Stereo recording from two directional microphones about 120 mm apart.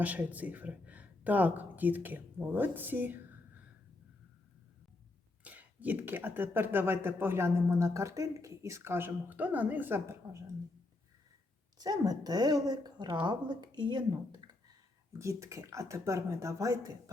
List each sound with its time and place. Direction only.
0.0 s speech: 15° right (ahead or behind)
5.4 s speech: 10° right (ahead or behind)
11.8 s speech: 30° right (ahead or behind)
15.2 s speech: 25° right (ahead or behind)